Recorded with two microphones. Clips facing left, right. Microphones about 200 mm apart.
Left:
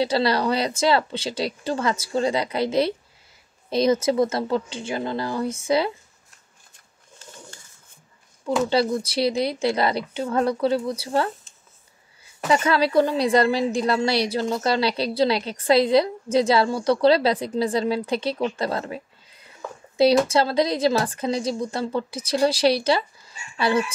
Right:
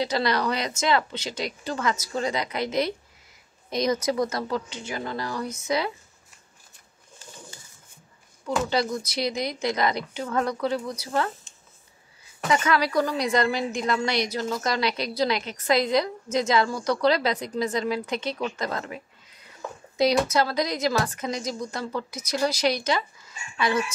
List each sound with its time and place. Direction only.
0.0 s a woman's voice: 30° left (ahead or behind)
8.6 s a woman's voice: 30° left (ahead or behind)